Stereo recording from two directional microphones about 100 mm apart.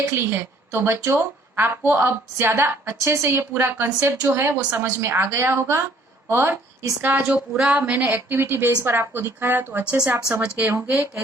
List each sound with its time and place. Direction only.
0.1 s a woman's voice: 25° right (ahead or behind)